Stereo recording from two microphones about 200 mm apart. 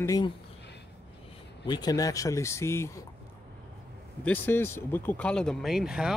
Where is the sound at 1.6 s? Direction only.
20° left (ahead or behind).